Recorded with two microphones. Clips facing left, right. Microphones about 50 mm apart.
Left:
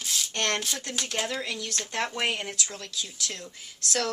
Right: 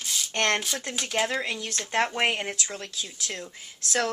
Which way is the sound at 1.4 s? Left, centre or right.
Right.